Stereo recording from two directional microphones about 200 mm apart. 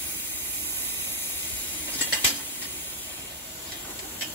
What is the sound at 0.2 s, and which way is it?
Steam, 10° left (ahead or behind).